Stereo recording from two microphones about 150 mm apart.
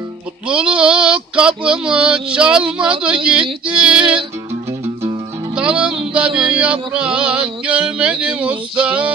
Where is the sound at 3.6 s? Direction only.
5° right (ahead or behind).